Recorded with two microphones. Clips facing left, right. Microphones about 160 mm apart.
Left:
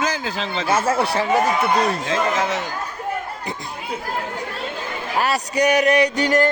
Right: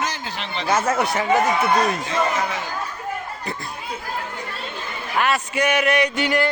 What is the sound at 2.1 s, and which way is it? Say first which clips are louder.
Speech: left 2 dB; 90° left.